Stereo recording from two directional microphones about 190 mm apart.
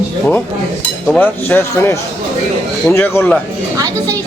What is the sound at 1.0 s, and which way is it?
A man's voice, 10° left (ahead or behind).